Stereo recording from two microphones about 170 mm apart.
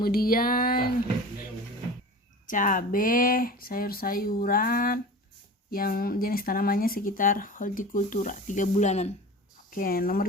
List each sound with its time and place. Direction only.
0.0 s speech: 60° left (ahead or behind)
2.5 s speech: 50° left (ahead or behind)
9.6 s speech: 55° left (ahead or behind)